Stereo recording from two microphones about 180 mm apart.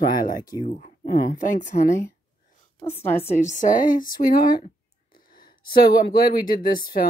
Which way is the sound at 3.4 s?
45° left (ahead or behind).